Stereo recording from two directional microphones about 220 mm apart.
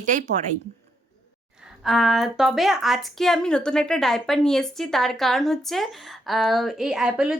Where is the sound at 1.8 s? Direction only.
Centre (ahead or behind).